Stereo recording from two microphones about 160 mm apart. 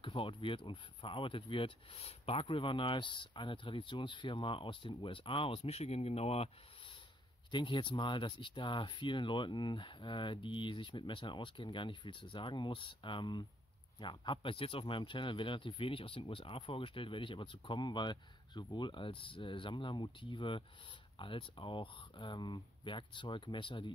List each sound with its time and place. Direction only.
0.0 s speech: 30° left (ahead or behind)
7.5 s speech: 30° left (ahead or behind)